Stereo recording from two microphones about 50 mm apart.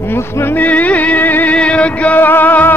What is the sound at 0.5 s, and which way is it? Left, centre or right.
Music, left.